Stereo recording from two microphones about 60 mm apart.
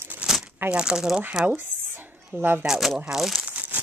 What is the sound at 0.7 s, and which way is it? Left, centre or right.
Speech, centre.